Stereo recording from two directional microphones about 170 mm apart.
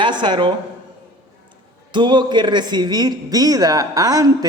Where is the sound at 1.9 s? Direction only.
25° right (ahead or behind).